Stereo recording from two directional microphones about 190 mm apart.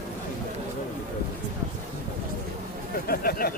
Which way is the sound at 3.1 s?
50° left (ahead or behind).